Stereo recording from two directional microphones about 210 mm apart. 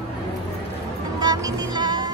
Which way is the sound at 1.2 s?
20° right (ahead or behind).